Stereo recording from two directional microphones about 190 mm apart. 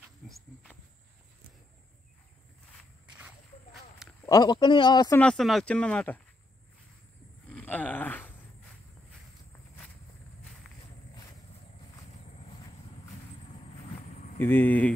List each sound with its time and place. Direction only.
0.2 s cricket: centre (ahead or behind)
4.3 s a man's voice: 20° left (ahead or behind)
5.2 s speech: centre (ahead or behind)
7.4 s a sound: 10° left (ahead or behind)
14.0 s a sound: 40° left (ahead or behind)
14.4 s speech: 10° left (ahead or behind)